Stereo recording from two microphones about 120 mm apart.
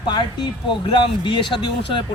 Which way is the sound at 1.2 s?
45° left (ahead or behind).